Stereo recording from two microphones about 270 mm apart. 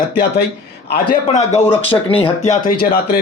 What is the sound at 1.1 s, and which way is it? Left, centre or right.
Speech, left.